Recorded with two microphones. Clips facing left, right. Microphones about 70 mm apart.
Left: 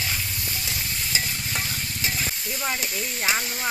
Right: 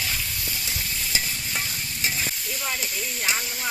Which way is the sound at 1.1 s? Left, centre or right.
Left.